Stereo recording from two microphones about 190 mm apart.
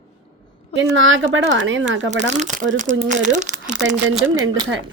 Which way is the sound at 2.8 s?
40° right (ahead or behind).